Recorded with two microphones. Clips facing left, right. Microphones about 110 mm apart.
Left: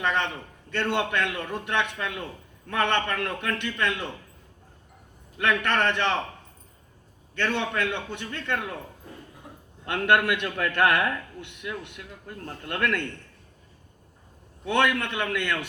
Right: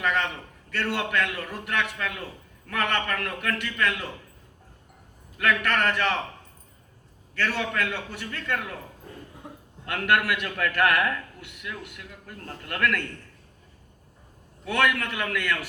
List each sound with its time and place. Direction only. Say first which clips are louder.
0.0 s a man's voice: even; 25° left (ahead or behind)
5.4 s a man's voice: even; 25° left (ahead or behind)
7.3 s a man's voice: left 1 dB; 25° left (ahead or behind)
9.8 s a man's voice: left 2 dB; 25° left (ahead or behind)
14.6 s a man's voice: left 1 dB; 25° left (ahead or behind)